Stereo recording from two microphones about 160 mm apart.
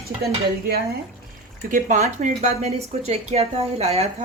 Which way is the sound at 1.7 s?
50° right (ahead or behind).